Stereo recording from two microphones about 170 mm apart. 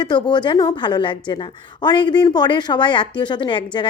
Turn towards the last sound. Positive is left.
turn(degrees=30)  # may be behind; listen again after turning